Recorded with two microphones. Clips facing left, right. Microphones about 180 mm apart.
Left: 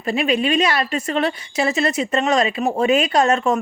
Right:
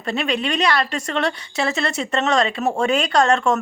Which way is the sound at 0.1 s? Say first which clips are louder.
Left 4 dB; 10° left (ahead or behind).